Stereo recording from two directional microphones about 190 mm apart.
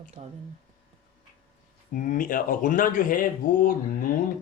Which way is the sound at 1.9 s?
45° left (ahead or behind).